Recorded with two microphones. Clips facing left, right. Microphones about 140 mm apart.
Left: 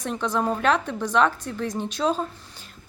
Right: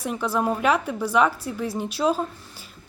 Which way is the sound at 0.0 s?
5° right (ahead or behind).